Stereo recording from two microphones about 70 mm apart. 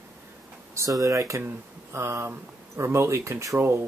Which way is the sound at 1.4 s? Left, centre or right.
Right.